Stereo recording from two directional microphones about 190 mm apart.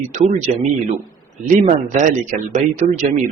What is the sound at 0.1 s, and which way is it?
Speech, 40° right (ahead or behind).